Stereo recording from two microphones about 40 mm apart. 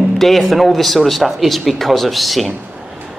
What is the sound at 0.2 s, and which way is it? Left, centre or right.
Speech, centre.